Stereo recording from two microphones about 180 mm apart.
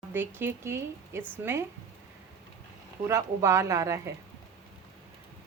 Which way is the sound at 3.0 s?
15° right (ahead or behind).